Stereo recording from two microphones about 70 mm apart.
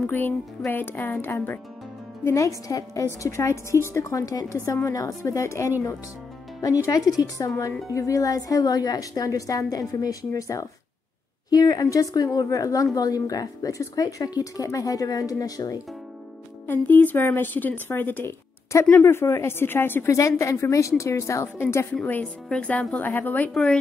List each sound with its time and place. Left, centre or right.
0.0 s a woman's voice: left
2.2 s speech: left
7.4 s a woman's voice: left
11.5 s a woman's voice: left
16.6 s a woman's voice: left
20.2 s speech: left
22.0 s a woman's voice: left
23.5 s speech: centre